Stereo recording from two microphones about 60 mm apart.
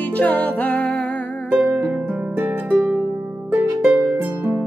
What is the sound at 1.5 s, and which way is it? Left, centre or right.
Music, centre.